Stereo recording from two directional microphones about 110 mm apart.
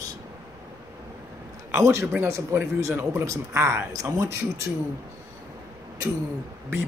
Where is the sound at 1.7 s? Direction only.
25° right (ahead or behind).